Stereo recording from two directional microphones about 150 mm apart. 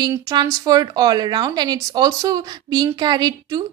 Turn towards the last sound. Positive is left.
turn(degrees=-25)  # may be behind; listen again after turning